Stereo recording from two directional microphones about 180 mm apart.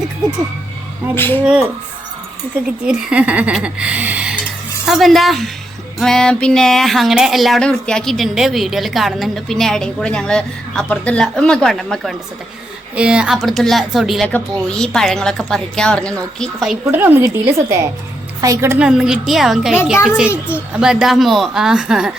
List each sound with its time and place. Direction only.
1.1 s speech: 10° left (ahead or behind)
2.8 s speech: 5° right (ahead or behind)
16.8 s speech: 10° right (ahead or behind)
18.9 s speech: 5° right (ahead or behind)